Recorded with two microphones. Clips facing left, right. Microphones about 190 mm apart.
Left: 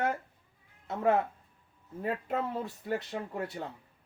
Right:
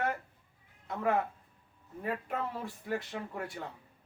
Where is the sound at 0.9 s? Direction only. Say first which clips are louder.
Left 3 dB; 30° left (ahead or behind).